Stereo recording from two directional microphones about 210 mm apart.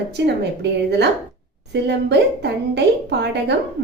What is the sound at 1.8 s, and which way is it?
A woman's voice, 55° right (ahead or behind).